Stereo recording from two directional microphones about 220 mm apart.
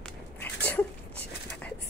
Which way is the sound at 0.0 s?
5° left (ahead or behind).